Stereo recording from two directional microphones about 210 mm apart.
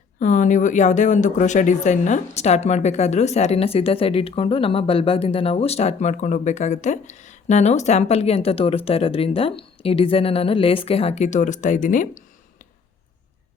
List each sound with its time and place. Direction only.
0.2 s speech: 35° left (ahead or behind)